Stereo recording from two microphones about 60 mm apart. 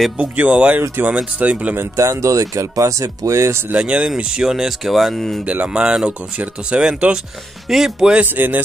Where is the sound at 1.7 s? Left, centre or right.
Right.